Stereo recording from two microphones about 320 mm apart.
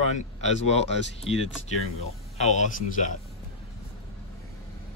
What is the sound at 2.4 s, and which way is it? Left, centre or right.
Speech, left.